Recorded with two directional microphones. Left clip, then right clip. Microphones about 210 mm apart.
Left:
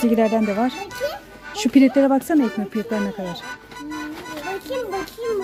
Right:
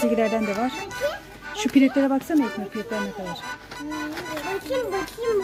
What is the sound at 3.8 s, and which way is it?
Music, centre (ahead or behind).